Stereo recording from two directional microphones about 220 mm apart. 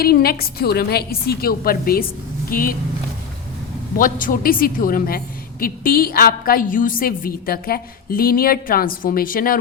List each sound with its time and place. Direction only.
0.0 s a woman's voice: 45° left (ahead or behind)
3.9 s a woman's voice: 40° left (ahead or behind)